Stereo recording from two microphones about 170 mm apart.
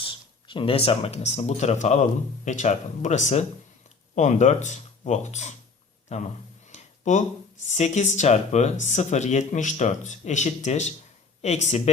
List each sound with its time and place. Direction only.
0.0 s speech: 30° left (ahead or behind)
6.7 s a sound: 45° left (ahead or behind)
7.7 s speech: 45° left (ahead or behind)